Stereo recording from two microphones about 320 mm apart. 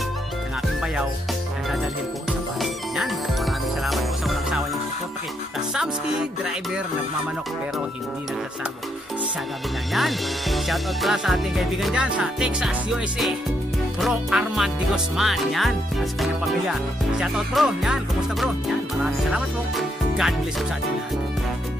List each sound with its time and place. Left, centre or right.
2.6 s music: centre
9.9 s music: centre
19.3 s music: centre